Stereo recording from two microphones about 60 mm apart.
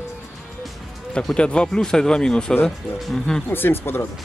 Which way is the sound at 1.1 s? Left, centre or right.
Centre.